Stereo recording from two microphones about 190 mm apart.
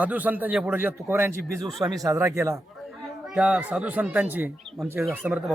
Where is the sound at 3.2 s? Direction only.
5° right (ahead or behind).